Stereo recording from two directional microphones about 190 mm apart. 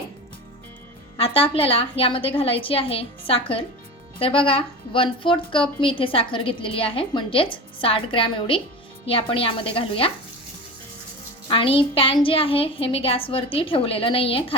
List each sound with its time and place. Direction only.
1.1 s a woman's voice: 30° left (ahead or behind)
11.4 s a woman's voice: 30° left (ahead or behind)